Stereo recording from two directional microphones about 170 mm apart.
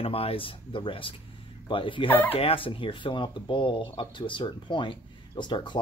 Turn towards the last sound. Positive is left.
turn(degrees=30)  # may be behind; listen again after turning